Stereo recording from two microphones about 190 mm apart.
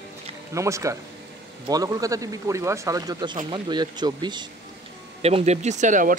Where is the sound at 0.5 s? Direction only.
15° right (ahead or behind).